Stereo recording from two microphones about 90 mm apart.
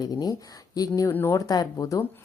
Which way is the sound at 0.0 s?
50° left (ahead or behind).